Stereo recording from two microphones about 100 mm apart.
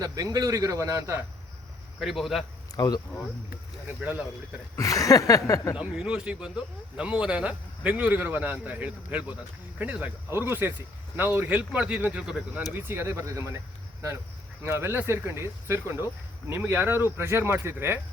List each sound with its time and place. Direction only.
0.0 s a man's voice: 35° right (ahead or behind)
2.0 s a man's voice: centre (ahead or behind)
2.7 s a sound: 40° left (ahead or behind)
3.8 s speech: 20° right (ahead or behind)
4.8 s a sound: 35° left (ahead or behind)
5.7 s a man's voice: 10° right (ahead or behind)
10.2 s a man's voice: 25° right (ahead or behind); by 12.6 s 10° right (ahead or behind)
12.7 s speech: 25° right (ahead or behind)
14.6 s speech: 25° right (ahead or behind)